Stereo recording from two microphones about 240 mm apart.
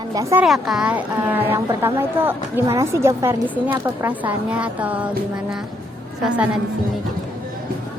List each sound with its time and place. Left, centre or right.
0.1 s speech: centre
0.4 s speech: centre
6.2 s a woman's voice: centre